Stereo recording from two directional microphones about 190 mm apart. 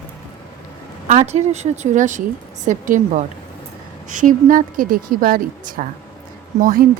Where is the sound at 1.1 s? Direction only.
35° right (ahead or behind).